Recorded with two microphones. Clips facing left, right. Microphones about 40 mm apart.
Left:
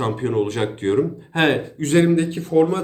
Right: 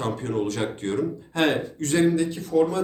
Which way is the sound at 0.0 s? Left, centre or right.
Left.